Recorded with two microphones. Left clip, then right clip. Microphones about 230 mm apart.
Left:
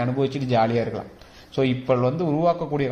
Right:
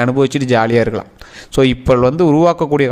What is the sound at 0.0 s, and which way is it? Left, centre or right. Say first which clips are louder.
A man's voice: right 10 dB; right.